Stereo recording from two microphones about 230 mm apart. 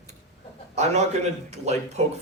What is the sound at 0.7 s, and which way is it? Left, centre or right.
A man's voice, right.